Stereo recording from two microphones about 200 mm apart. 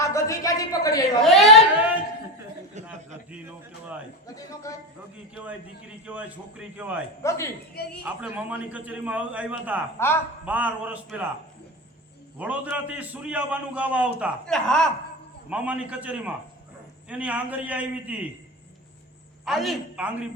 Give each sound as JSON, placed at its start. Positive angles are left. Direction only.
{"t": 0.0, "sound": "a sound", "side_deg": 15}
{"t": 1.2, "sound": "a sound", "side_deg": 0}
{"t": 2.8, "sound": "chuckle", "side_deg": -35}
{"t": 4.7, "sound": "a woman's voice", "side_deg": 15}
{"t": 5.3, "sound": "a man's voice", "side_deg": -5}
{"t": 7.2, "sound": "a woman's voice", "side_deg": 15}
{"t": 8.2, "sound": "a man's voice", "side_deg": -5}
{"t": 12.4, "sound": "a man's voice", "side_deg": -5}
{"t": 19.5, "sound": "a man's voice", "side_deg": 0}